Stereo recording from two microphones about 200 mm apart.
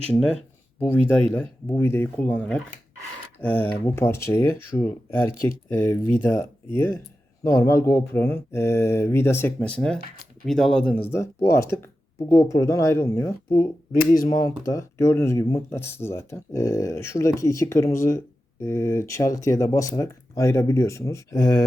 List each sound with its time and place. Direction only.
0.8 s speech: 10° left (ahead or behind)